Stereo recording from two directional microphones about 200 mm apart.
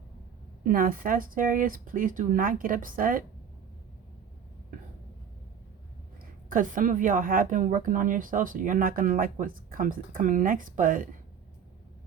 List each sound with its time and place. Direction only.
0.6 s a woman's voice: 45° right (ahead or behind)
6.5 s a woman's voice: 40° right (ahead or behind)